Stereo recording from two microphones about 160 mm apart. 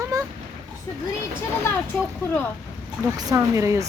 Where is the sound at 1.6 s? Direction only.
10° left (ahead or behind).